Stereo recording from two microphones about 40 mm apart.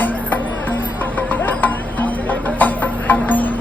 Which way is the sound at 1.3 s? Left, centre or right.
Left.